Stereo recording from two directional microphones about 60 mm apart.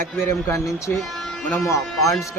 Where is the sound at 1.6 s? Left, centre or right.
Left.